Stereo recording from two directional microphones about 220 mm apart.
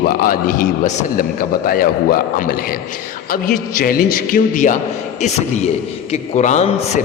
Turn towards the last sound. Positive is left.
turn(degrees=30)  # may be behind; listen again after turning